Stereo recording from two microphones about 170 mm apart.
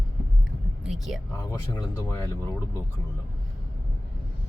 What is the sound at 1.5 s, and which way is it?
Speech, 15° left (ahead or behind).